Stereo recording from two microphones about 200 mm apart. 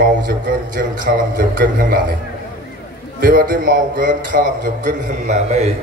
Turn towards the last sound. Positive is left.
turn(degrees=-35)  # may be behind; listen again after turning